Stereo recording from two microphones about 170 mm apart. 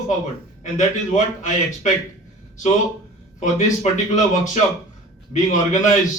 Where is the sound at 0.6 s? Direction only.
45° left (ahead or behind).